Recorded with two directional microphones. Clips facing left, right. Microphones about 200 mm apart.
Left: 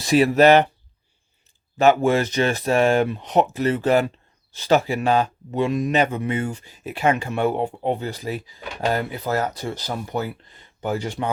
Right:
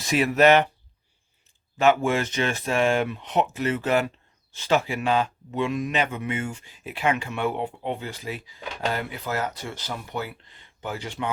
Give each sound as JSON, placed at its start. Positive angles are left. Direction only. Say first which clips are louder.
{"t": 0.0, "sound": "speech", "louder": "left 4 dB", "side_deg": 35}
{"t": 1.8, "sound": "speech", "louder": "left 4 dB", "side_deg": 40}